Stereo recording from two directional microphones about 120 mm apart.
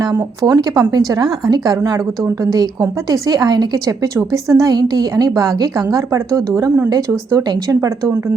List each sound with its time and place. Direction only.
0.4 s a woman's voice: 30° right (ahead or behind)